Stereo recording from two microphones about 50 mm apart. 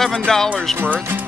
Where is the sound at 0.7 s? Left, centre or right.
Right.